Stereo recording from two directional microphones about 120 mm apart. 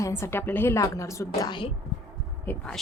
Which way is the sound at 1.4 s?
40° left (ahead or behind).